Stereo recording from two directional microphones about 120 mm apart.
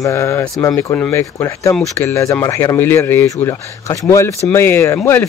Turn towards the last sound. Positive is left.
turn(degrees=20)  # may be behind; listen again after turning